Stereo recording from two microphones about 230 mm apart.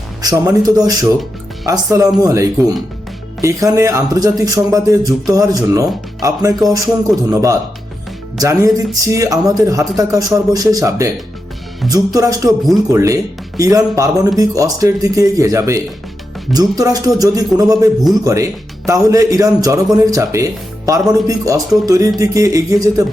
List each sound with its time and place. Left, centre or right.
0.2 s speech: centre
12.5 s speech: centre
12.9 s speech: centre